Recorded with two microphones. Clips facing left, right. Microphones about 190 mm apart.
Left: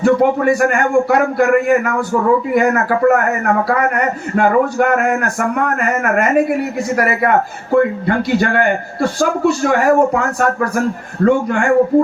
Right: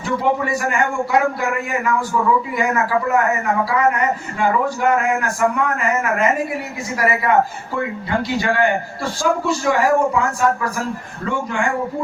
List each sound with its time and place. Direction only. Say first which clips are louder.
0.0 s a man's voice: left 8 dB; 55° left (ahead or behind)